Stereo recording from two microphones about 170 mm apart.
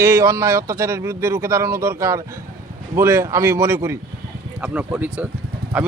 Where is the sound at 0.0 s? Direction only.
15° right (ahead or behind).